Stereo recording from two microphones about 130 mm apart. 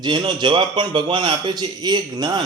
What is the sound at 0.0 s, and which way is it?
A man's voice, 35° right (ahead or behind).